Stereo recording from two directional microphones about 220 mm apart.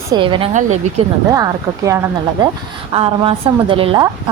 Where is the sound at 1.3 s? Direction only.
15° right (ahead or behind).